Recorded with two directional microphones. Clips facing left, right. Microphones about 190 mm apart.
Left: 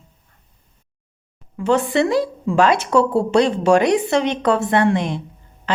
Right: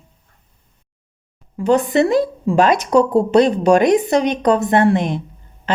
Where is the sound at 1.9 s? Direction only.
50° right (ahead or behind).